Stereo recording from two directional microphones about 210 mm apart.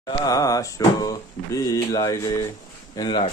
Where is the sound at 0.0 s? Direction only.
15° left (ahead or behind).